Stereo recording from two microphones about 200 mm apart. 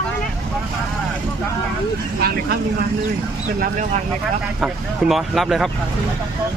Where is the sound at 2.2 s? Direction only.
50° right (ahead or behind).